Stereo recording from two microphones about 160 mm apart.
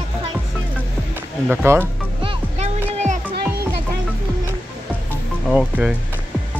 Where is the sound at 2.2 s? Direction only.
45° right (ahead or behind).